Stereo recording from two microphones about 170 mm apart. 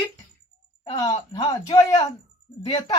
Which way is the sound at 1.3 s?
20° left (ahead or behind).